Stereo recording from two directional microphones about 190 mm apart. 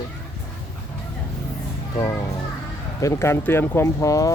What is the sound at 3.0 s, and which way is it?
Speech, 15° left (ahead or behind).